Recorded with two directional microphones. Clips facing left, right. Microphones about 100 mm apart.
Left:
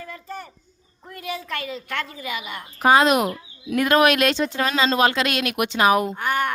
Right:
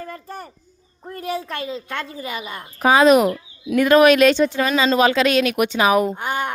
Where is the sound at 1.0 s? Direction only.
40° right (ahead or behind).